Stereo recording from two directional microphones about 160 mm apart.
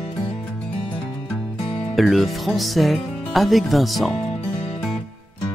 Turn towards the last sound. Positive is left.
turn(degrees=0)  # may be behind; listen again after turning